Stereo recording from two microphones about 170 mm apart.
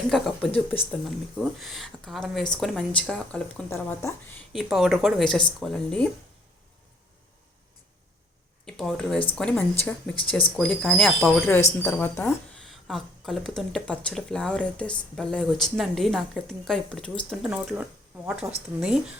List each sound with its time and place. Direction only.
0.1 s a woman's voice: 5° left (ahead or behind)
4.5 s speech: centre (ahead or behind)
8.6 s a woman's voice: 5° left (ahead or behind)
11.8 s a woman's voice: 15° left (ahead or behind); by 17.8 s 5° right (ahead or behind)
18.4 s speech: 15° right (ahead or behind)
18.8 s speech: 5° right (ahead or behind)